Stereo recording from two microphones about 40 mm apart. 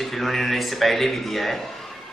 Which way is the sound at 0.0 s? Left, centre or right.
Centre.